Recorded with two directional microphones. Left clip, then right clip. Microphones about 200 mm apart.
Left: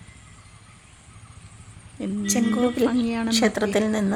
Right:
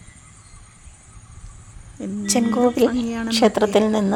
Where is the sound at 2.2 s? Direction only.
15° right (ahead or behind).